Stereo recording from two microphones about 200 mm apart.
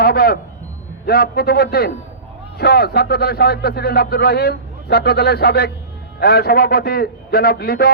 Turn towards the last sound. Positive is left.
turn(degrees=50)  # may be behind; listen again after turning